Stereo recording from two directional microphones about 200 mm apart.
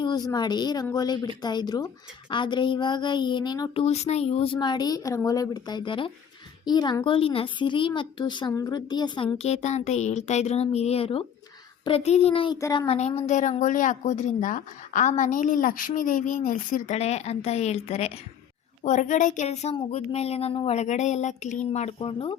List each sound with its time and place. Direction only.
0.0 s a child's voice: 20° left (ahead or behind)
3.8 s a child's voice: 35° left (ahead or behind)
12.5 s speech: 15° left (ahead or behind)
12.9 s a woman's voice: 35° left (ahead or behind)